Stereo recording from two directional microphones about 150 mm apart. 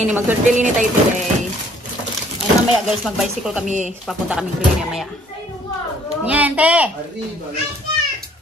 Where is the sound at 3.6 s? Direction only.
55° right (ahead or behind).